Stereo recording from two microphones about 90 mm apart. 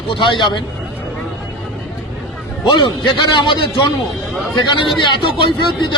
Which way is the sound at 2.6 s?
60° left (ahead or behind).